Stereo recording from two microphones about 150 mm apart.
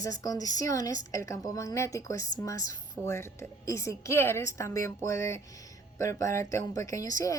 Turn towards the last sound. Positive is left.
turn(degrees=25)  # may be behind; listen again after turning